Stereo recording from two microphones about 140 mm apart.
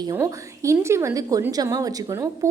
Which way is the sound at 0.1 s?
20° right (ahead or behind).